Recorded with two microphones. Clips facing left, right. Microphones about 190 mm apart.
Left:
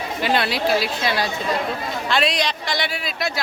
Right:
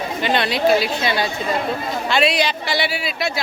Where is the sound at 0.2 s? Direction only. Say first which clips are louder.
Right 2 dB; 5° left (ahead or behind).